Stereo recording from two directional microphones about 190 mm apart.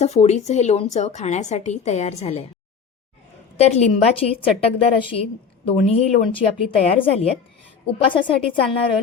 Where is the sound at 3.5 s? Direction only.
35° left (ahead or behind).